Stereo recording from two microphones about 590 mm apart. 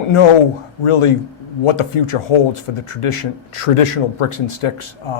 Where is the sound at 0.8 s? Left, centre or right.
Left.